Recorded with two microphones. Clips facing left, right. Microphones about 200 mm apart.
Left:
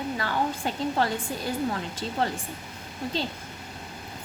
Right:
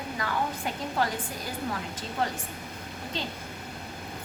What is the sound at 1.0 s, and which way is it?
Speech, 30° left (ahead or behind).